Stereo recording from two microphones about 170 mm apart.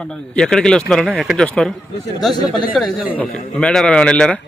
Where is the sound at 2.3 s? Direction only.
25° left (ahead or behind).